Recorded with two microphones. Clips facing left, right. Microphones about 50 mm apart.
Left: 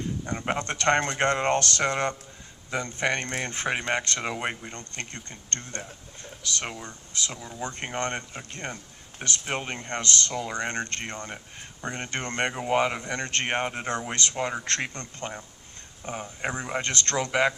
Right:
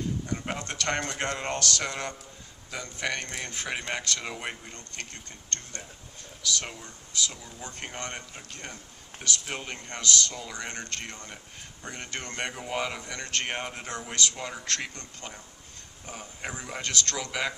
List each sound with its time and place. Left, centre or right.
0.3 s speech: left